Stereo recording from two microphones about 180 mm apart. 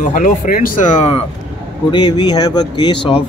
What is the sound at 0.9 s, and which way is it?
Speech, 30° left (ahead or behind).